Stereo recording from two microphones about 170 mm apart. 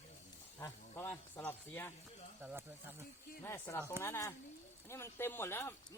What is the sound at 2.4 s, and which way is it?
Speech, 10° right (ahead or behind).